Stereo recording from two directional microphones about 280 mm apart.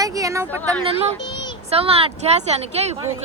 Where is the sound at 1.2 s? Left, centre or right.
Centre.